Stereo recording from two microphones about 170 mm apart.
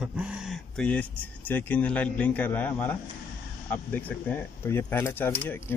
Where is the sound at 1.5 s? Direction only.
10° left (ahead or behind).